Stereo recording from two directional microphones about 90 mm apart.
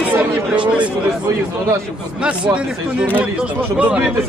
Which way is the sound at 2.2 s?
10° right (ahead or behind).